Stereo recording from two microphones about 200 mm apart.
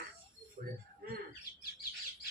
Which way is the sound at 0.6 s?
40° right (ahead or behind).